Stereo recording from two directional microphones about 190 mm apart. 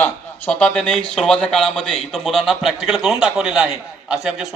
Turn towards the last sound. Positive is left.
turn(degrees=0)  # may be behind; listen again after turning